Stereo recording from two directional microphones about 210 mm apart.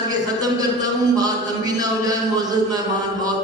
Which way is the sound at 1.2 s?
20° right (ahead or behind).